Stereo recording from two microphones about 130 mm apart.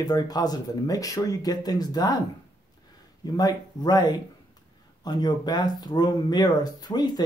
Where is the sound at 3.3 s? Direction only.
30° left (ahead or behind).